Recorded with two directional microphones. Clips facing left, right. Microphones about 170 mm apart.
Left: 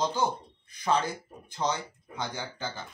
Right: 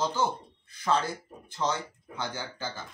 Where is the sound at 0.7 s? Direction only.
15° left (ahead or behind).